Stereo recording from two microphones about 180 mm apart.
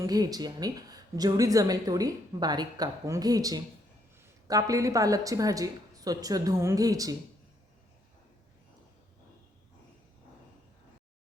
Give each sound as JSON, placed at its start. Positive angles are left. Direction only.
{"t": 0.0, "sound": "a woman's voice", "side_deg": -20}